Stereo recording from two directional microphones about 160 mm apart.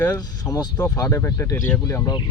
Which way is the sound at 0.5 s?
20° left (ahead or behind).